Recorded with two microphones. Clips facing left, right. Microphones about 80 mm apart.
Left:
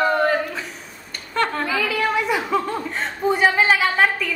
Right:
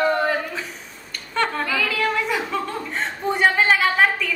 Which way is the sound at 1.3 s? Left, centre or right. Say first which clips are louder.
Left 1 dB; centre.